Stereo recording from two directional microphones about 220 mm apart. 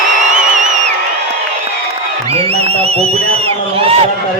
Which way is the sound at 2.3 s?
25° right (ahead or behind).